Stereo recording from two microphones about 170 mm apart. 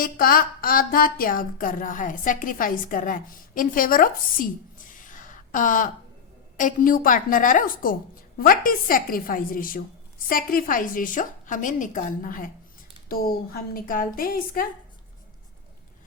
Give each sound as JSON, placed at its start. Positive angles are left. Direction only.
{"t": 0.0, "sound": "a woman's voice", "side_deg": 60}